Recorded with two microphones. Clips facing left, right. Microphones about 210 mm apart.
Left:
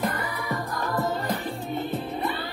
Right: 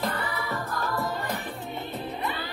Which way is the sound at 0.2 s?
15° left (ahead or behind).